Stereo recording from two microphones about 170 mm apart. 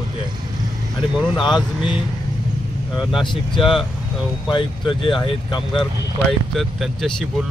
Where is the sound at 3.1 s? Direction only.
30° left (ahead or behind).